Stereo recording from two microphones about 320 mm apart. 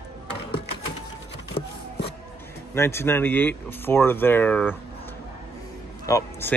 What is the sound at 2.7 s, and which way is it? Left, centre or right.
Speech, centre.